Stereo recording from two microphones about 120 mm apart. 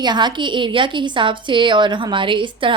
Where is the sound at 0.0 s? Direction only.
40° right (ahead or behind).